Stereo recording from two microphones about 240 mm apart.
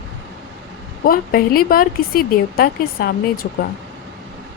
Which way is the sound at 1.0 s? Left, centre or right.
Left.